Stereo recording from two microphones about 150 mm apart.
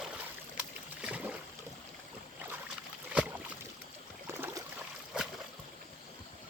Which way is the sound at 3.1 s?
10° right (ahead or behind).